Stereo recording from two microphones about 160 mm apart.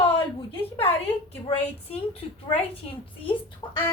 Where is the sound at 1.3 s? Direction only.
40° left (ahead or behind).